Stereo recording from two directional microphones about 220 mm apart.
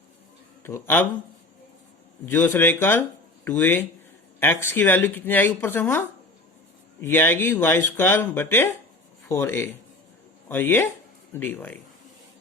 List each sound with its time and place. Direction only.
0.6 s speech: 10° left (ahead or behind)
2.2 s speech: 10° left (ahead or behind)